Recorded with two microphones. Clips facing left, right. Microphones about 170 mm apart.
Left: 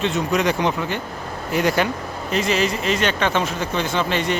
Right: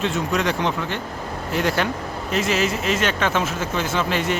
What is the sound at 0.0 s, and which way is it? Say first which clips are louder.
A man's voice: left 2 dB; centre (ahead or behind).